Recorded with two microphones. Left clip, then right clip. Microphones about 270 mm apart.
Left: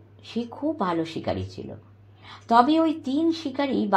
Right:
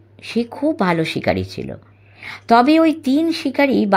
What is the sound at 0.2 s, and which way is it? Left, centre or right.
Speech, right.